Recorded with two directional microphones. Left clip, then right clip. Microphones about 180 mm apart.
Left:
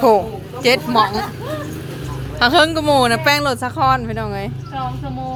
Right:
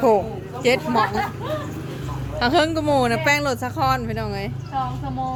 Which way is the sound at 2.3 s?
5° right (ahead or behind).